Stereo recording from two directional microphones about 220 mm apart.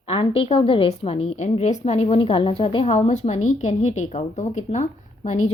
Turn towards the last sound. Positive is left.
turn(degrees=30)  # may be behind; listen again after turning